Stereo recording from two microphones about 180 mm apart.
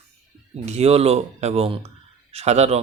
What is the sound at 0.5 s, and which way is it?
A man's voice, 35° right (ahead or behind).